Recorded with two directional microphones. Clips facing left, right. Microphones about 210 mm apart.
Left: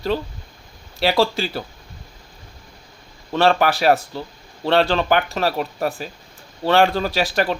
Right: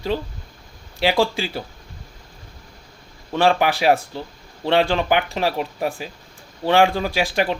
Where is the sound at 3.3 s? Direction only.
15° right (ahead or behind).